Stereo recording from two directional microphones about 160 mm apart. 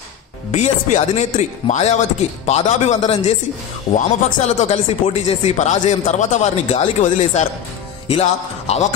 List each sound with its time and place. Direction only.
0.5 s speech: 45° left (ahead or behind)
8.1 s music: 40° left (ahead or behind)